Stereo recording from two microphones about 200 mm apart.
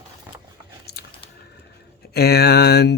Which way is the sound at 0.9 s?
50° left (ahead or behind).